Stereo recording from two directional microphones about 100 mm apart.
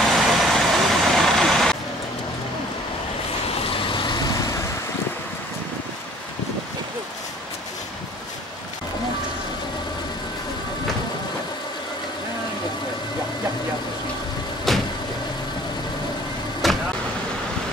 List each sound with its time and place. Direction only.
0.1 s vehicle: centre (ahead or behind)
3.7 s vehicle: 55° left (ahead or behind)
14.7 s vehicle: centre (ahead or behind)
16.6 s vehicle: centre (ahead or behind)